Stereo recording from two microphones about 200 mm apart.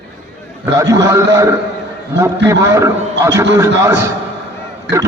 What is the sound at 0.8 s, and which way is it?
A man's voice, 15° right (ahead or behind).